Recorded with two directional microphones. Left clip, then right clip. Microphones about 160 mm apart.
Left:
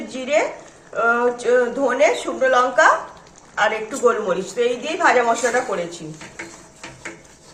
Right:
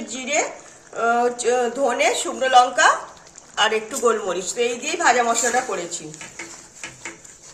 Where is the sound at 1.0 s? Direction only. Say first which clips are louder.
Left 1 dB; 70° right (ahead or behind).